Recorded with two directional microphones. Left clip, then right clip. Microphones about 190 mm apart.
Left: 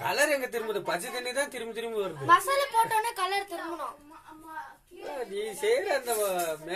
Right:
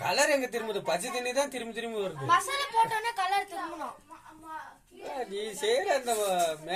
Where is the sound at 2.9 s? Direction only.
50° left (ahead or behind).